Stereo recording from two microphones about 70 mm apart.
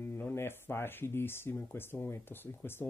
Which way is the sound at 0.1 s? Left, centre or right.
Left.